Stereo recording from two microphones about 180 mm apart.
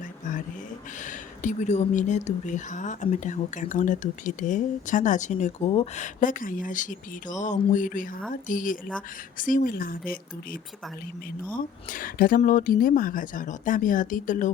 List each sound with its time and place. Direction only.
1.0 s speech: 45° left (ahead or behind)